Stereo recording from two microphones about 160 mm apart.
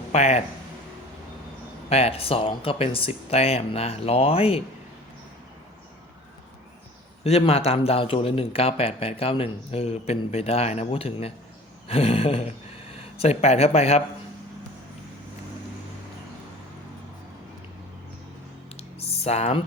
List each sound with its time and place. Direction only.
0.1 s speech: 45° left (ahead or behind)
1.9 s speech: 40° left (ahead or behind)
7.3 s speech: 40° left (ahead or behind)
18.8 s a sound: 40° left (ahead or behind)